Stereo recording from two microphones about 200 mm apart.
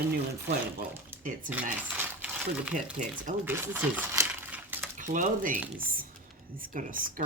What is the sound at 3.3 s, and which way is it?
Speech, 35° right (ahead or behind).